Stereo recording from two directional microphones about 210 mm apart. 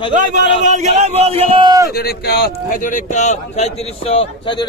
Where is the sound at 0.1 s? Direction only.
35° right (ahead or behind); by 1.9 s 20° right (ahead or behind).